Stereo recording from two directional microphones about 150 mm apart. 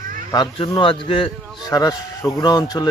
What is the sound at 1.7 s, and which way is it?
Speech, 25° left (ahead or behind).